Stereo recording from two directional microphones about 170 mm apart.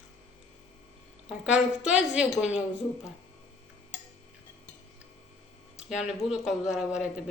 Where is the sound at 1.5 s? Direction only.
5° right (ahead or behind).